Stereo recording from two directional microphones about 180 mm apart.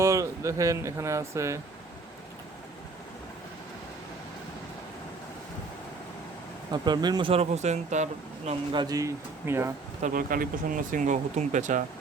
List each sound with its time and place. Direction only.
0.0 s speech: 15° right (ahead or behind)
6.7 s speech: 25° right (ahead or behind); by 8.5 s 40° right (ahead or behind)
8.7 s speech: 20° right (ahead or behind)
10.0 s speech: 50° right (ahead or behind)